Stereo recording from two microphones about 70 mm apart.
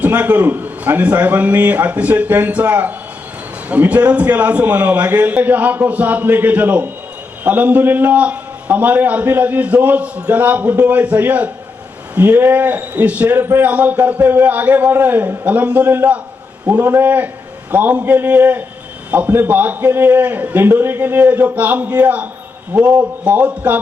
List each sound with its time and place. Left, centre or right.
0.0 s a man's voice: right